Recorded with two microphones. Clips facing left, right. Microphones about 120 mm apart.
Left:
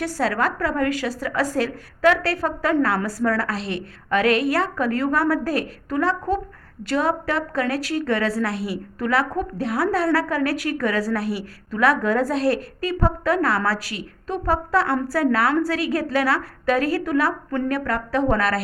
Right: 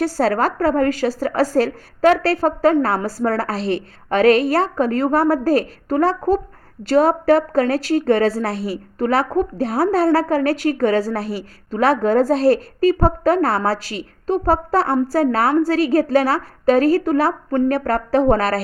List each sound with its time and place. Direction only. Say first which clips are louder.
0.0 s a woman's voice: right 5 dB; 35° right (ahead or behind)